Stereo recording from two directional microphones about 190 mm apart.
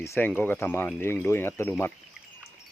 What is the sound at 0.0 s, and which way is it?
Speech, 10° left (ahead or behind).